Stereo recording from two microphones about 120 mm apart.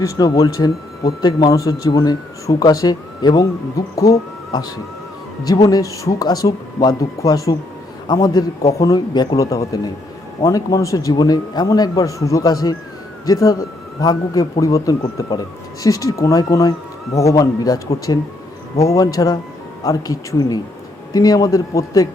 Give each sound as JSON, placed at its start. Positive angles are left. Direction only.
{"t": 0.0, "sound": "a man's voice", "side_deg": 30}